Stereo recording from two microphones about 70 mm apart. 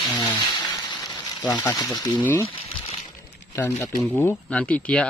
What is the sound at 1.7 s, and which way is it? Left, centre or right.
Speech, left.